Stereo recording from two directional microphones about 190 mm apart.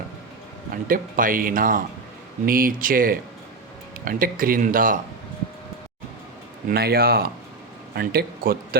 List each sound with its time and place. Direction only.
0.9 s speech: 45° right (ahead or behind)
6.7 s speech: 55° right (ahead or behind)